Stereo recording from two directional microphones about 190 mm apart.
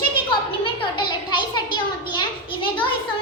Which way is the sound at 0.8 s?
25° left (ahead or behind).